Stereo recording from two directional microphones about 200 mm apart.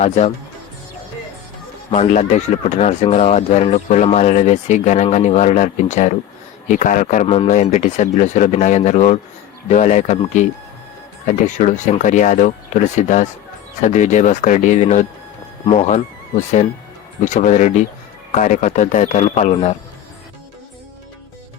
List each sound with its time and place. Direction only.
0.0 s speech: 35° left (ahead or behind)
1.9 s speech: 35° left (ahead or behind)
17.2 s speech: 40° left (ahead or behind)